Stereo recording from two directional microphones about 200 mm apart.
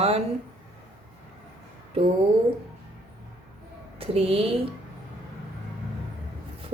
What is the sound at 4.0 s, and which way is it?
Speech, 30° right (ahead or behind).